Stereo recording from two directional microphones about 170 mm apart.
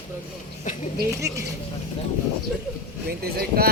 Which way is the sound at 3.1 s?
60° right (ahead or behind).